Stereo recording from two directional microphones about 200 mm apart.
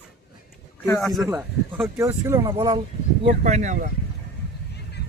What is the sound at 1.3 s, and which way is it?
Speech, 10° right (ahead or behind).